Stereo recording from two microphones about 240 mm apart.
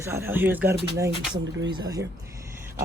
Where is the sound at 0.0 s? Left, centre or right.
Centre.